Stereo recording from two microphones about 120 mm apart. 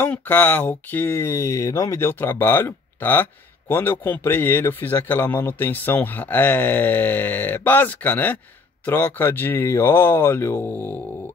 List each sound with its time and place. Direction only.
0.0 s speech: 15° left (ahead or behind)